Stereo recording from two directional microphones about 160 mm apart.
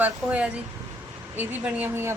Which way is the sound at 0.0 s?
10° right (ahead or behind).